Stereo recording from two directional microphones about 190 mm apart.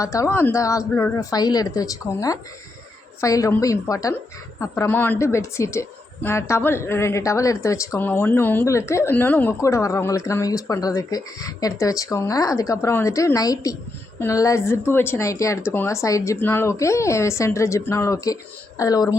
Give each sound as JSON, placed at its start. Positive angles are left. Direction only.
{"t": 0.0, "sound": "a woman's voice", "side_deg": 15}